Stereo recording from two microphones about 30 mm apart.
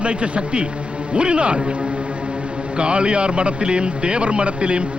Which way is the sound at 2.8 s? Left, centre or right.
Right.